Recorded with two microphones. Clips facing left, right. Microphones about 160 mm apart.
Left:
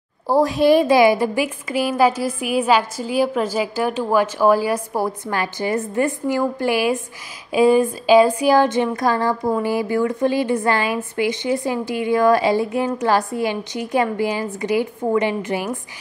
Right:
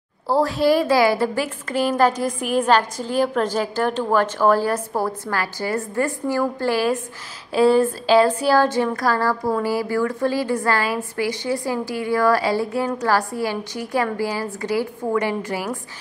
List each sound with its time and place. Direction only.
0.3 s a woman's voice: 15° left (ahead or behind)